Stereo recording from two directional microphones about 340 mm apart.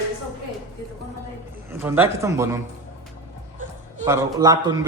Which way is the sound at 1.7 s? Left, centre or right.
Centre.